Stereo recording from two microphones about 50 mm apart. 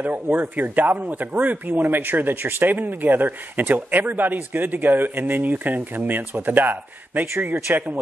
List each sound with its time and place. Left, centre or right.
0.0 s speech: right